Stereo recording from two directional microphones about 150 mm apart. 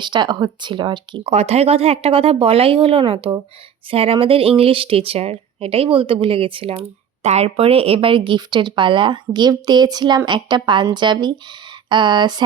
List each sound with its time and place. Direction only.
0.0 s speech: 30° right (ahead or behind)
1.2 s speech: 45° right (ahead or behind); by 12.4 s 30° right (ahead or behind)